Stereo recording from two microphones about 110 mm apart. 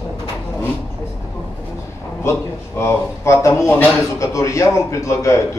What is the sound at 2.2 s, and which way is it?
A man's voice, 25° left (ahead or behind).